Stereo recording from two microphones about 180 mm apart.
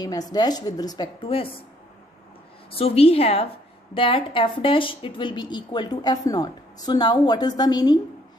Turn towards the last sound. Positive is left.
turn(degrees=20)  # may be behind; listen again after turning